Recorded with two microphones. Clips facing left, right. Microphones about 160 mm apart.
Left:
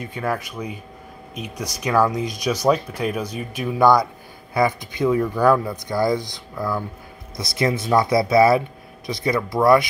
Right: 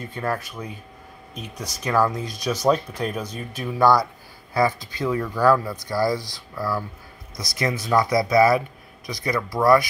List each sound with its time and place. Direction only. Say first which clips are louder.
0.0 s speech: left 2 dB; 10° left (ahead or behind)